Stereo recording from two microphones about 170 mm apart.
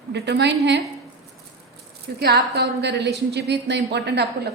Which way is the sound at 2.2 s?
75° right (ahead or behind).